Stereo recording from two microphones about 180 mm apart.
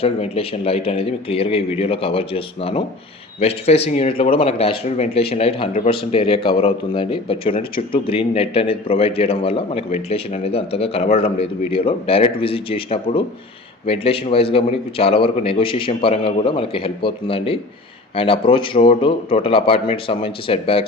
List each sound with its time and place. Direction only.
0.0 s a man's voice: 35° left (ahead or behind)